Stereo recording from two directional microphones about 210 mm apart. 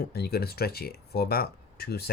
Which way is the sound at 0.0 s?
50° left (ahead or behind).